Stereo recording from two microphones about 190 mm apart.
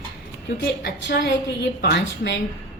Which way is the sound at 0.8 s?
60° left (ahead or behind).